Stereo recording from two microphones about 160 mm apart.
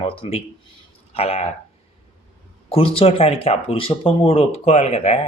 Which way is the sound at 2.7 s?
35° left (ahead or behind).